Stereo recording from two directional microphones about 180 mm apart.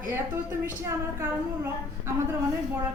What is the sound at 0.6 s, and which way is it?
Speech, 15° right (ahead or behind).